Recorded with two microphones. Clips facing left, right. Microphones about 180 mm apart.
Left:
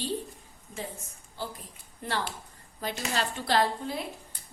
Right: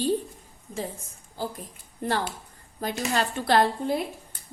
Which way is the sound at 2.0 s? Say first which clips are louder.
Right 5 dB; 45° right (ahead or behind).